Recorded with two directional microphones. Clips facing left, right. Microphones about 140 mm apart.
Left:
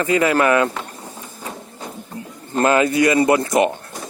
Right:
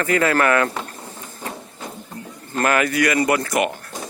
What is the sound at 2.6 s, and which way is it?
Speech, 25° left (ahead or behind).